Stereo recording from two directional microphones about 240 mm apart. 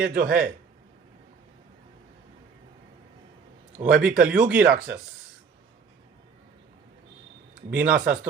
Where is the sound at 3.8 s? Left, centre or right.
Right.